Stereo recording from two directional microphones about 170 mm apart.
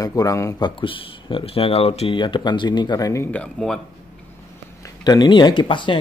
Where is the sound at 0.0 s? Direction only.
20° left (ahead or behind); by 3.8 s 5° left (ahead or behind).